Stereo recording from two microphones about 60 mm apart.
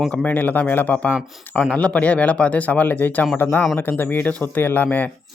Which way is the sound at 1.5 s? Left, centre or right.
Left.